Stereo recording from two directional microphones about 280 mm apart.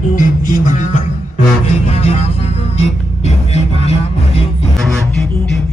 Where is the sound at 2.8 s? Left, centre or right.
Left.